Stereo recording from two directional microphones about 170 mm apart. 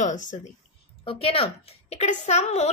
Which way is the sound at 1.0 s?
35° left (ahead or behind).